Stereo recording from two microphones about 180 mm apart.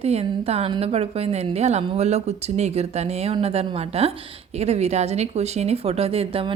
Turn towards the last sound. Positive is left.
turn(degrees=-35)  # may be behind; listen again after turning